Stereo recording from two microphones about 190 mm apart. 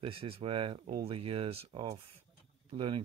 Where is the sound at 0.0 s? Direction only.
30° right (ahead or behind).